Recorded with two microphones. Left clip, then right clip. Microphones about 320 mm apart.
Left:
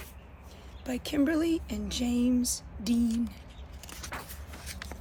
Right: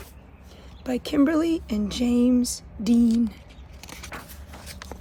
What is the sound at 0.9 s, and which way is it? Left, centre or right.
A woman's voice, right.